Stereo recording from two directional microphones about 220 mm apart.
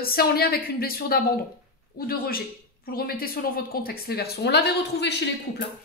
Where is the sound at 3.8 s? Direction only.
45° left (ahead or behind).